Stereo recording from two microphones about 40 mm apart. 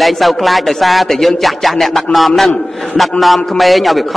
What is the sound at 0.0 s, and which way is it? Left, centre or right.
A man's voice, centre.